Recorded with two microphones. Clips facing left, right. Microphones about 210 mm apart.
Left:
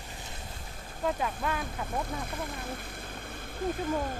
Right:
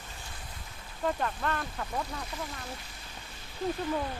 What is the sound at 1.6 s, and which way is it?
Speech, 50° left (ahead or behind).